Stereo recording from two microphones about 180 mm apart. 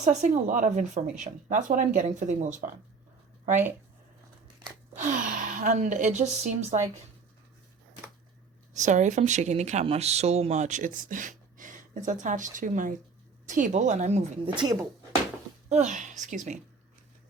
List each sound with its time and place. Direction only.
0.0 s speech: 40° right (ahead or behind)
4.9 s speech: 45° right (ahead or behind)
8.7 s speech: 40° right (ahead or behind); by 14.8 s 20° right (ahead or behind)
15.7 s speech: 40° right (ahead or behind)